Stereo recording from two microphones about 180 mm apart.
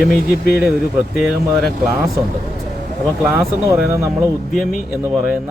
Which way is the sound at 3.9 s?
15° right (ahead or behind).